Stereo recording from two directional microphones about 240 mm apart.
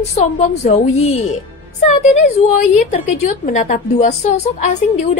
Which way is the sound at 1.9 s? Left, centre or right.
Left.